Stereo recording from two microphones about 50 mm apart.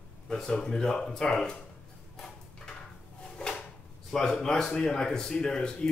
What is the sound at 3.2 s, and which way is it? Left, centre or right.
Drawer open or close, centre.